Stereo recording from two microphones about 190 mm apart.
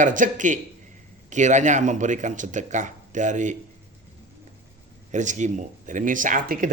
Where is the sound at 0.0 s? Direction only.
45° right (ahead or behind).